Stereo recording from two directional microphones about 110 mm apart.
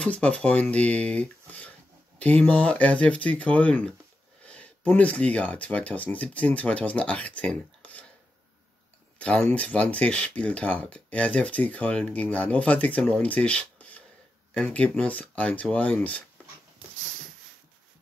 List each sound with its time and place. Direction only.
0.0 s speech: 10° left (ahead or behind)
9.2 s speech: 10° left (ahead or behind)